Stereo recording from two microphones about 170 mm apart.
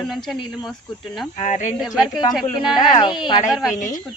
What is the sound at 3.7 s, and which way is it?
Speech, 50° left (ahead or behind).